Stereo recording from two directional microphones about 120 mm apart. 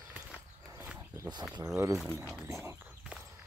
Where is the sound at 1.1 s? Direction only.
40° right (ahead or behind).